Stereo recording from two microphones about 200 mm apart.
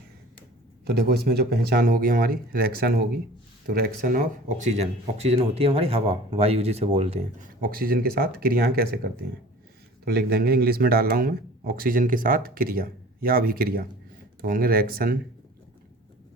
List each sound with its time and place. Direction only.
0.9 s speech: 55° right (ahead or behind); by 7.3 s 30° right (ahead or behind)
7.6 s speech: 45° right (ahead or behind)
10.0 s speech: 50° right (ahead or behind)